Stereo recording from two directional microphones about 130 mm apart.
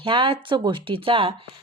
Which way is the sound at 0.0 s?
40° right (ahead or behind).